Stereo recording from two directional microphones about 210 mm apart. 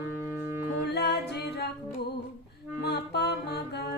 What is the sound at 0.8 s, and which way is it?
Music, 50° left (ahead or behind).